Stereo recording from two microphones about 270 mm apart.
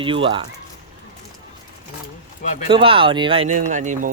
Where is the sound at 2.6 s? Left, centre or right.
Centre.